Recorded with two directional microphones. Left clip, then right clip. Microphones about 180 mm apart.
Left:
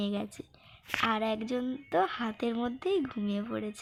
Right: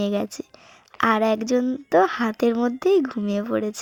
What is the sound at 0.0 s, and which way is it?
A woman's voice, 45° right (ahead or behind).